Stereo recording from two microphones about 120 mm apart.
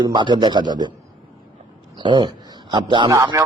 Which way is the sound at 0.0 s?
40° right (ahead or behind).